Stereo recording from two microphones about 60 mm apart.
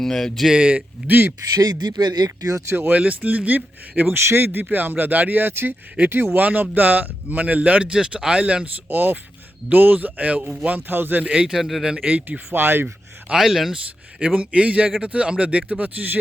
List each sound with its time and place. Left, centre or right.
0.0 s speech: centre
0.4 s speech: centre
1.0 s speech: right
2.2 s speech: right
2.9 s speech: right
4.2 s speech: right; by 8.7 s centre
8.9 s speech: right
11.2 s a man's voice: centre
12.0 s speech: centre
12.5 s speech: right
13.3 s speech: centre
14.2 s speech: centre